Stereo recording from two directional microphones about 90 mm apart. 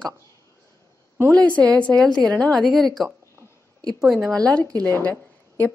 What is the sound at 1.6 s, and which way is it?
A woman's voice, 15° left (ahead or behind).